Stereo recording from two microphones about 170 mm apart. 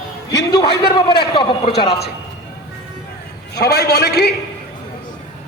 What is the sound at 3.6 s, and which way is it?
Speech, 70° left (ahead or behind).